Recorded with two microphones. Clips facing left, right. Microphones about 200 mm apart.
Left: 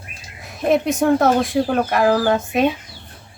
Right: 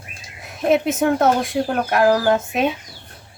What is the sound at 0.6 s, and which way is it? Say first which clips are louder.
Speech: even; centre (ahead or behind).